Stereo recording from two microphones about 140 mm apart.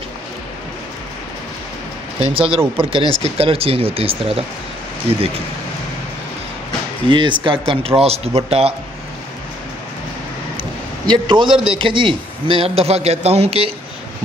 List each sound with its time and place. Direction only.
2.1 s a man's voice: 40° right (ahead or behind)
7.1 s a man's voice: 35° right (ahead or behind)
11.1 s a man's voice: 35° right (ahead or behind)